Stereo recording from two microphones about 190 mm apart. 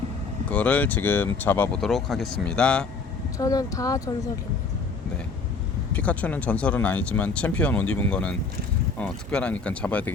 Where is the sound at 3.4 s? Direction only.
20° left (ahead or behind).